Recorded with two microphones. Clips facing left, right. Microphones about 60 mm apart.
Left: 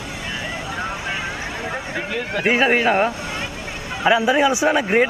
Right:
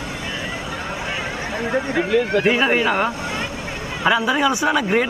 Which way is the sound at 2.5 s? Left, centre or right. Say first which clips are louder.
Left 5 dB; centre.